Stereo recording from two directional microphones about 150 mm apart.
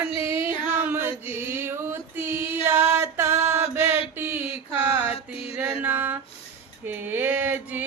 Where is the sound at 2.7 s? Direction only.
15° right (ahead or behind).